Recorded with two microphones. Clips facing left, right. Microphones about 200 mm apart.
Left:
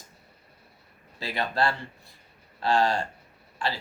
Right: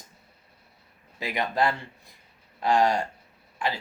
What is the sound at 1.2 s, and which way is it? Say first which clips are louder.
Speech: right 1 dB; 15° right (ahead or behind).